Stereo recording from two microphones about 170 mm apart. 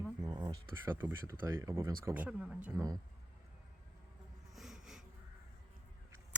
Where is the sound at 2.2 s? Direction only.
5° right (ahead or behind).